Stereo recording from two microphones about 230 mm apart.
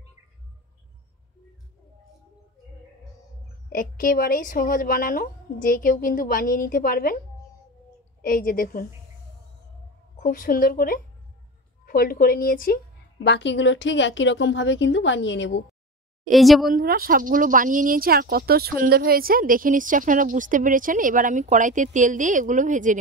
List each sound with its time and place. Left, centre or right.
3.7 s a woman's voice: left
8.2 s a woman's voice: left
10.1 s a woman's voice: left
16.3 s a woman's voice: centre
16.7 s speech: right